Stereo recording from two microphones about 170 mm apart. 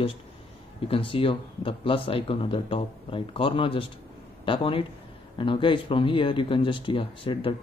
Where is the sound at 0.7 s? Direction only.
35° left (ahead or behind).